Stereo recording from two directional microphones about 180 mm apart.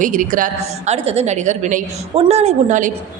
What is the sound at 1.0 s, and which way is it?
A woman's voice, 35° right (ahead or behind).